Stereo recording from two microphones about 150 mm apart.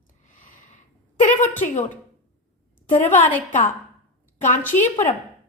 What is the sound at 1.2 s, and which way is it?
Speech, 50° left (ahead or behind).